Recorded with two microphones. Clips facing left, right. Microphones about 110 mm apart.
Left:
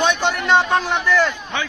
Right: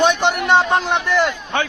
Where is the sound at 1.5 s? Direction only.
50° right (ahead or behind).